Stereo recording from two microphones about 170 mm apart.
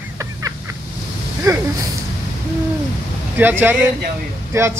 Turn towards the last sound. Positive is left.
turn(degrees=-15)  # may be behind; listen again after turning